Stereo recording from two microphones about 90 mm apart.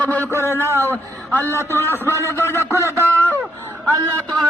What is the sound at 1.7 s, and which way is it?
A man's voice, 25° left (ahead or behind).